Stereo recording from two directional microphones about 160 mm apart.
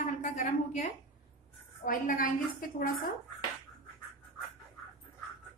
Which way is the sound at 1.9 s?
60° left (ahead or behind).